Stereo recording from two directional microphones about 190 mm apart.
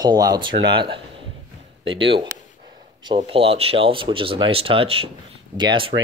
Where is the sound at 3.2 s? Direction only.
30° right (ahead or behind).